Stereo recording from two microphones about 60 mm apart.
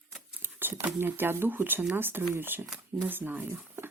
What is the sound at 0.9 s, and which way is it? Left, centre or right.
Speech, right.